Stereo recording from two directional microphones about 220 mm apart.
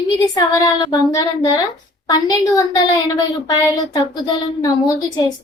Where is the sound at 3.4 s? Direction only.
15° left (ahead or behind).